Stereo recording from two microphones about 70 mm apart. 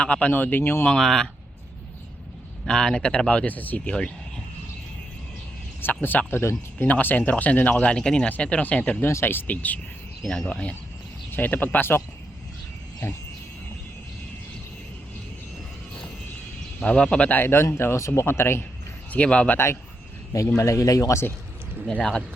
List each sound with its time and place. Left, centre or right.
0.0 s speech: centre; by 0.9 s left
0.9 s speech: centre
2.6 s speech: centre
5.8 s speech: left
6.4 s speech: left
6.8 s speech: left
9.0 s speech: left
10.2 s speech: centre
11.3 s speech: left
16.8 s speech: centre; by 18.6 s left
19.1 s speech: centre
20.6 s speech: left